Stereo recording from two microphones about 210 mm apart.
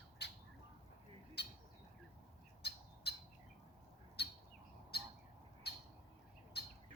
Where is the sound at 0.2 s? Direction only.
50° left (ahead or behind).